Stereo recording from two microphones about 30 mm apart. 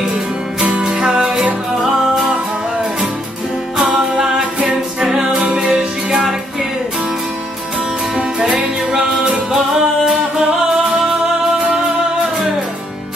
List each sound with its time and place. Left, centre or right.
0.7 s music: right
0.9 s music: right
3.7 s music: centre
4.6 s a capella: right
5.1 s music: right
8.9 s music: right
9.5 s music: centre